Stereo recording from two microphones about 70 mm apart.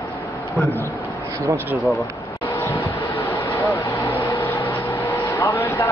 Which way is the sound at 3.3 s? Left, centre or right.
Left.